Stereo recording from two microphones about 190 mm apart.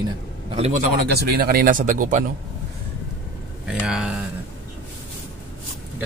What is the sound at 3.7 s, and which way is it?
Speech, 5° right (ahead or behind).